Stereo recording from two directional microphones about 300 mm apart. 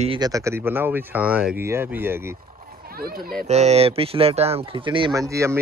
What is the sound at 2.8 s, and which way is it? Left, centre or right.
Speech, right.